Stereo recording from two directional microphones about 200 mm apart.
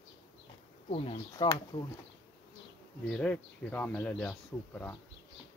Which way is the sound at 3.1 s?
5° left (ahead or behind).